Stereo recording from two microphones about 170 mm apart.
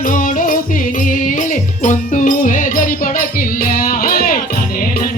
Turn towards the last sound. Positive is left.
turn(degrees=55)  # may be behind; listen again after turning